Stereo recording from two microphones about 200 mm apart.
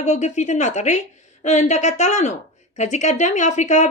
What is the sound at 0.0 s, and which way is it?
Speech, 35° left (ahead or behind).